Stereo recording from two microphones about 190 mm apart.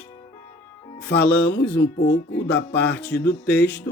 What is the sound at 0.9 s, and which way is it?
Music, 65° left (ahead or behind).